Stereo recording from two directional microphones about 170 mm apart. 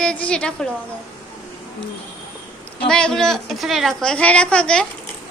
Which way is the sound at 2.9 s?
5° left (ahead or behind).